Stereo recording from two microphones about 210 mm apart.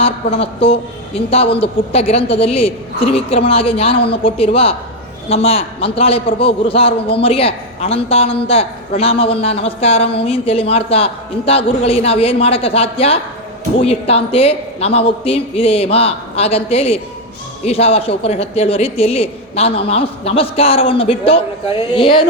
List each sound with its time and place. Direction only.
0.0 s a woman's voice: 30° left (ahead or behind)